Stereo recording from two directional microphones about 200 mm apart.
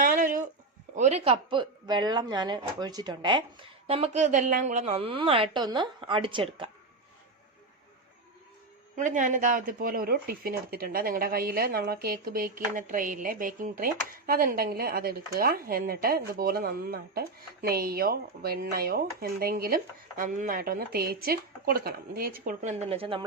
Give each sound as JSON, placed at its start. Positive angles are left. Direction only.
{"t": 0.0, "sound": "a sound", "side_deg": -45}
{"t": 0.9, "sound": "speech", "side_deg": -35}
{"t": 9.0, "sound": "speech", "side_deg": -40}